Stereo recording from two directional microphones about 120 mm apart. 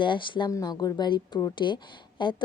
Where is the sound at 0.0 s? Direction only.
40° left (ahead or behind).